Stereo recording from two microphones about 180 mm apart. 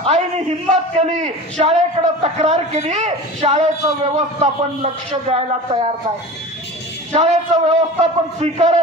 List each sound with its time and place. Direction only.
0.0 s a man's voice: 40° right (ahead or behind)
7.1 s a man's voice: 40° right (ahead or behind)